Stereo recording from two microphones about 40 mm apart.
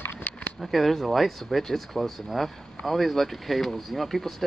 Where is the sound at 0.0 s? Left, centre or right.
Left.